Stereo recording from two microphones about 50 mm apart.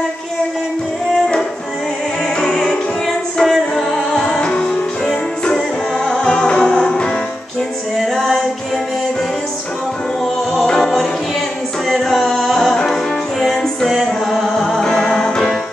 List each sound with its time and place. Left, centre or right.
2.4 s music: centre
8.0 s music: centre
10.6 s music: centre
15.0 s music: centre